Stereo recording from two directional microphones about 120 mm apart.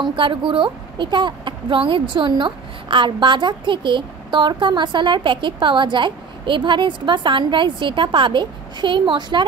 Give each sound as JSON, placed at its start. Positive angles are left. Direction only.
{"t": 0.0, "sound": "a woman's voice", "side_deg": -45}